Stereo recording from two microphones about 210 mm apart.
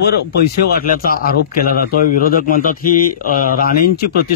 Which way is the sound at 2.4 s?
40° left (ahead or behind).